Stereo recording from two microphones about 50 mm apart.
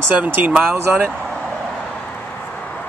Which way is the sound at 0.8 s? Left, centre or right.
Right.